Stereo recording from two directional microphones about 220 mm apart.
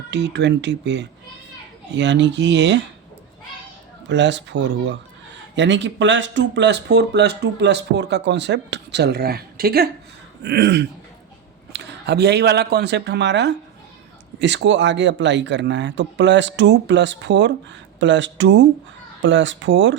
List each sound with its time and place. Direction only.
0.1 s speech: 50° right (ahead or behind)
4.1 s speech: 55° right (ahead or behind)